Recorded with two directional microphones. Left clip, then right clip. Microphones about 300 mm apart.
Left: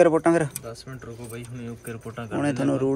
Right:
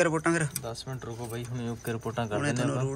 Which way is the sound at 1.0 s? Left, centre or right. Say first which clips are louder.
Even; right.